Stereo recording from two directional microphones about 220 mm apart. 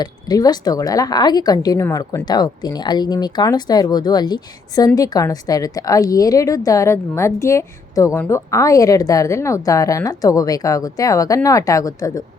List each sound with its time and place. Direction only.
0.0 s a woman's voice: 15° left (ahead or behind)